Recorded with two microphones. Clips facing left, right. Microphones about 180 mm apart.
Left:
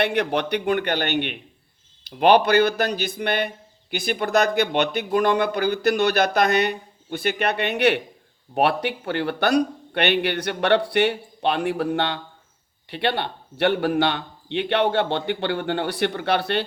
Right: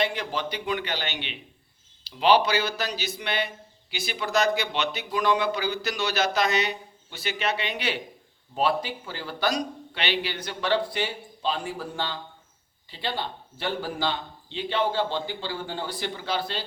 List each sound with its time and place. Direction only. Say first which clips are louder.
0.0 s a man's voice: left 6 dB; 65° left (ahead or behind)